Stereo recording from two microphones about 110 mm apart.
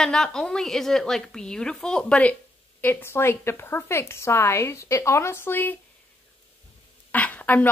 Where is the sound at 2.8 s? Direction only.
20° left (ahead or behind).